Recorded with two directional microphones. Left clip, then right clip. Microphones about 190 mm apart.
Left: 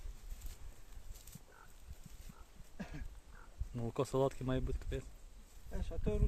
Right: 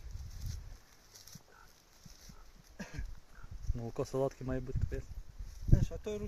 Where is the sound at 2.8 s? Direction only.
40° right (ahead or behind).